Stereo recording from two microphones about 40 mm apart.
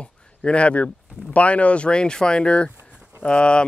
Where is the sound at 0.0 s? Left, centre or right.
Left.